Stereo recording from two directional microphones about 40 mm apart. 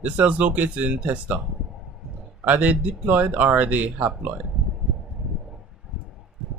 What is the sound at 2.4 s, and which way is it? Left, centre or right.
Speech, right.